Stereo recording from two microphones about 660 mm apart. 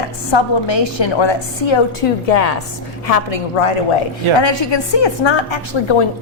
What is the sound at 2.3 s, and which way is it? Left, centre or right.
A woman's voice, left.